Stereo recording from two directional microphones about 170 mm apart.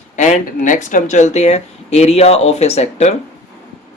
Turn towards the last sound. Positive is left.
turn(degrees=40)  # may be behind; listen again after turning